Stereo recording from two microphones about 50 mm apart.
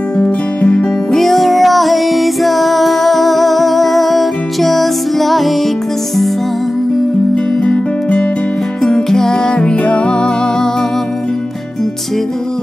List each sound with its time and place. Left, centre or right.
0.2 s music: left
1.1 s music: centre
7.6 s music: centre